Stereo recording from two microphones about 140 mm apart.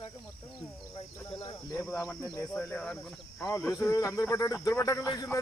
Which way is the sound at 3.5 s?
20° left (ahead or behind).